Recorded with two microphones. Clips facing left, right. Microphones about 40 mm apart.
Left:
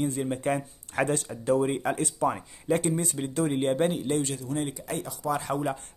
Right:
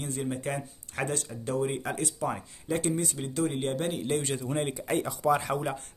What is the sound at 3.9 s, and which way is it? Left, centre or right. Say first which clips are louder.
Speech: left 2 dB; centre.